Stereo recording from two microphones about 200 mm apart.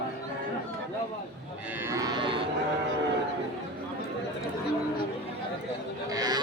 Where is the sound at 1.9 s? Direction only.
20° right (ahead or behind).